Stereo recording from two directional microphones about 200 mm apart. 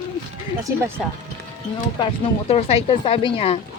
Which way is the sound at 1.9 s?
30° left (ahead or behind).